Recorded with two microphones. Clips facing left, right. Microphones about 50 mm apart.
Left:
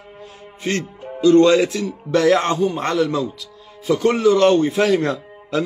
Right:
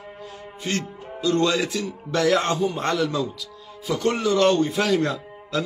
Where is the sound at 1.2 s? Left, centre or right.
Left.